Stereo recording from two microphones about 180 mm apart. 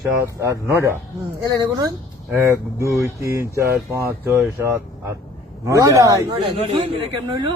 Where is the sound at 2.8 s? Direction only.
15° right (ahead or behind).